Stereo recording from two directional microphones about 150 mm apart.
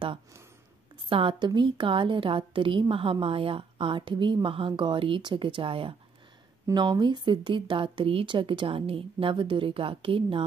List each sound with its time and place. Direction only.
1.0 s a woman's voice: 35° right (ahead or behind)